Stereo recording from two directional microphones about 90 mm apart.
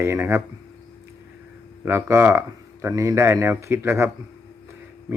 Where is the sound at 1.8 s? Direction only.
30° right (ahead or behind).